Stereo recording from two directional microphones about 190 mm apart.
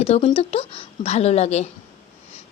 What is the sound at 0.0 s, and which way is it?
A woman's voice, 30° left (ahead or behind).